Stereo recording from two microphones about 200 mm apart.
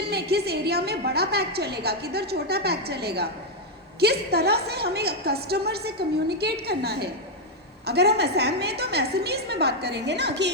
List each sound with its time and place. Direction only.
0.1 s a woman's voice: 55° right (ahead or behind)